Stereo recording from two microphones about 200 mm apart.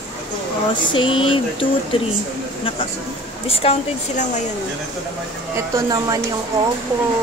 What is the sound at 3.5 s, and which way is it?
Speech, 30° left (ahead or behind).